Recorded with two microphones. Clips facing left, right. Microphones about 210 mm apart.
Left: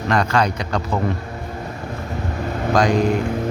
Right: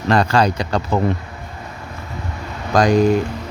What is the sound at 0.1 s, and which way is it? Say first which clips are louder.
Speech: right 3 dB; 30° right (ahead or behind).